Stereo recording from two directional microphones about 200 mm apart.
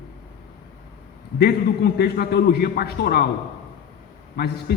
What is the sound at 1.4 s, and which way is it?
A man's voice, 55° left (ahead or behind).